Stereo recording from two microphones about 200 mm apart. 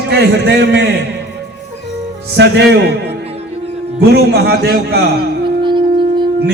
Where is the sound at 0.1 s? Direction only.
55° right (ahead or behind).